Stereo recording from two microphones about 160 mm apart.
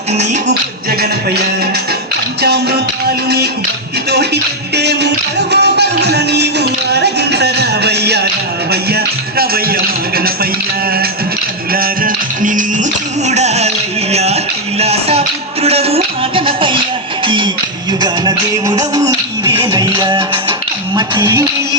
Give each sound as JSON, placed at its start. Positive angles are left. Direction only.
{"t": 2.4, "sound": "music", "side_deg": -90}
{"t": 4.7, "sound": "music", "side_deg": -90}
{"t": 8.7, "sound": "music", "side_deg": -80}
{"t": 11.7, "sound": "music", "side_deg": -65}
{"t": 18.6, "sound": "music", "side_deg": -25}